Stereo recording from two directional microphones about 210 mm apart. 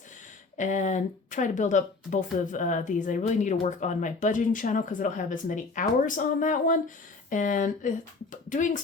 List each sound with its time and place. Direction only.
0.5 s speech: 35° left (ahead or behind)